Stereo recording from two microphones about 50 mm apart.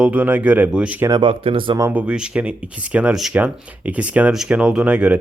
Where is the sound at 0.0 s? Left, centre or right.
Right.